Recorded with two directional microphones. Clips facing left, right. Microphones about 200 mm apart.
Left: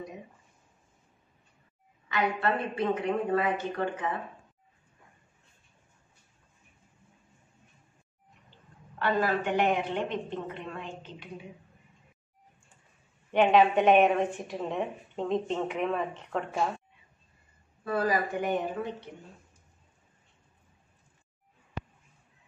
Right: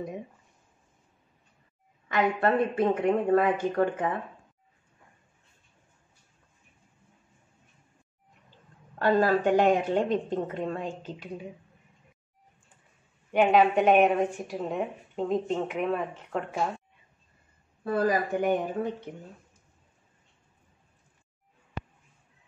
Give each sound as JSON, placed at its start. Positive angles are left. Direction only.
{"t": 2.0, "sound": "a woman's voice", "side_deg": -45}
{"t": 8.9, "sound": "a woman's voice", "side_deg": -40}
{"t": 13.3, "sound": "a woman's voice", "side_deg": -5}
{"t": 17.9, "sound": "a woman's voice", "side_deg": -50}